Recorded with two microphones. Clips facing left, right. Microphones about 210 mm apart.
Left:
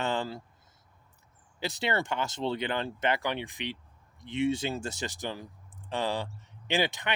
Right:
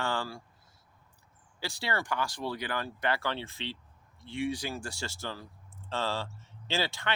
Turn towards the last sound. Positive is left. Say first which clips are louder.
# left 3 dB
turn(degrees=20)  # may be behind; listen again after turning